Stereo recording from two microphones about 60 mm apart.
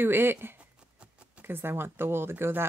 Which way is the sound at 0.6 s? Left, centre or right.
Centre.